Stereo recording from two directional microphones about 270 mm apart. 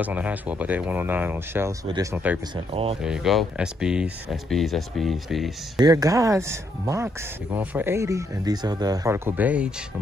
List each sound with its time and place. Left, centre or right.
0.0 s speech: centre
2.5 s speech: right
3.0 s speech: centre
5.8 s speech: centre